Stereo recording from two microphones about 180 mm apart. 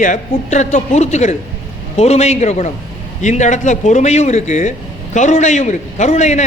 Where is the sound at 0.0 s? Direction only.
40° left (ahead or behind).